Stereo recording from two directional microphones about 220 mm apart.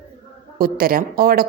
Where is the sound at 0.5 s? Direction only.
40° right (ahead or behind).